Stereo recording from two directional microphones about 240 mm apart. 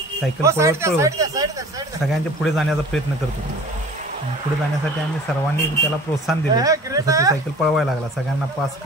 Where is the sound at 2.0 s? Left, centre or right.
Centre.